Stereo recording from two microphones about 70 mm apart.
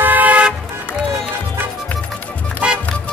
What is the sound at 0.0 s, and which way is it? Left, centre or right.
Toot, right.